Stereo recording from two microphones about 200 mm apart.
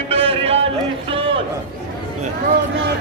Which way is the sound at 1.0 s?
25° right (ahead or behind).